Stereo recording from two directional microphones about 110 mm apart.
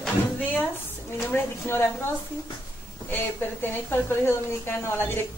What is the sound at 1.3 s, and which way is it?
Speech, 20° left (ahead or behind).